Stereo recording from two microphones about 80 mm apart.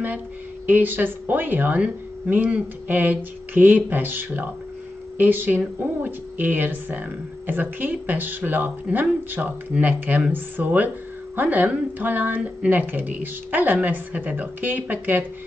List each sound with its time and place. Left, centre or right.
0.7 s speech: right